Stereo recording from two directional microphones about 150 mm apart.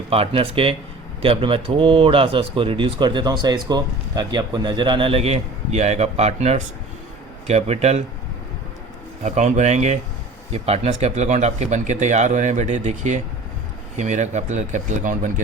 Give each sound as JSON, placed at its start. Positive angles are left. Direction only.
{"t": 0.1, "sound": "speech", "side_deg": -40}
{"t": 9.2, "sound": "speech", "side_deg": -50}